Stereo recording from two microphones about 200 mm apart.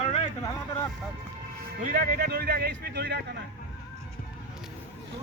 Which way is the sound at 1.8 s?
45° right (ahead or behind).